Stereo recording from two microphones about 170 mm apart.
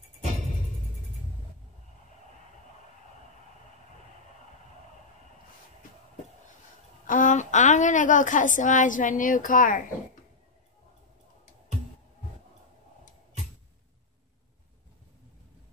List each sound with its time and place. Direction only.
7.1 s a woman's voice: 50° left (ahead or behind)